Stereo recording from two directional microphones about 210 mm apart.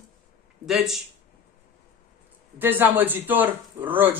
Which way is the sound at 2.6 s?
10° right (ahead or behind).